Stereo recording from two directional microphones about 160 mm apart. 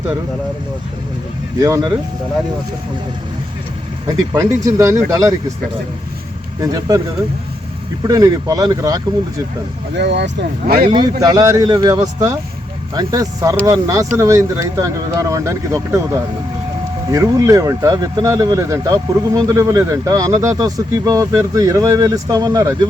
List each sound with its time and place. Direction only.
1.6 s speech: 15° right (ahead or behind)
4.4 s speech: 20° right (ahead or behind)
6.6 s speech: 25° right (ahead or behind)
8.0 s speech: 20° right (ahead or behind)
9.9 s speech: 90° right
10.8 s speech: 30° right (ahead or behind)